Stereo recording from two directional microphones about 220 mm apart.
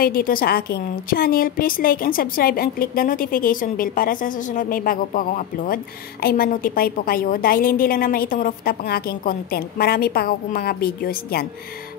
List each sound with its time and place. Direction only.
0.0 s a woman's voice: 40° left (ahead or behind)